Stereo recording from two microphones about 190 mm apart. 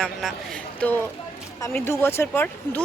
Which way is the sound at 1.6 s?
15° left (ahead or behind).